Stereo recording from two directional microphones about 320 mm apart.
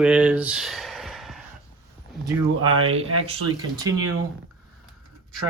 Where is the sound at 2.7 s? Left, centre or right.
Right.